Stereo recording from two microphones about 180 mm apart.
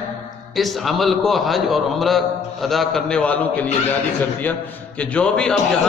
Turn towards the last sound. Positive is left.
turn(degrees=5)  # may be behind; listen again after turning